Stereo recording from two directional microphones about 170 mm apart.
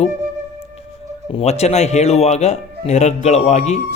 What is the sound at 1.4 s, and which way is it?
Speech, 40° left (ahead or behind).